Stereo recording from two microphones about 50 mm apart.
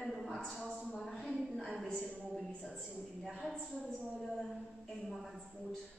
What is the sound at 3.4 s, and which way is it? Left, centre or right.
Speech, centre.